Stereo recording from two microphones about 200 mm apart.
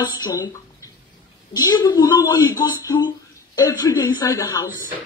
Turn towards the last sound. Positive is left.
turn(degrees=15)  # may be behind; listen again after turning